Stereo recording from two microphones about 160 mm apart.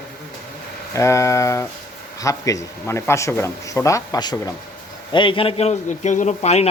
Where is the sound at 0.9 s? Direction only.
20° left (ahead or behind).